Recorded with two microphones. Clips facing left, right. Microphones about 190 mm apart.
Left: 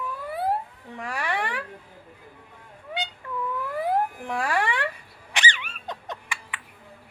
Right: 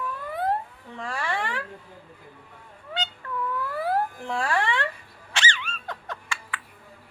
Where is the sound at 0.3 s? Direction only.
10° left (ahead or behind).